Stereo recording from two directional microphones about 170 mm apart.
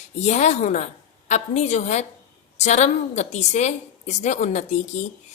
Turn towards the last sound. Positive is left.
turn(degrees=45)  # may be behind; listen again after turning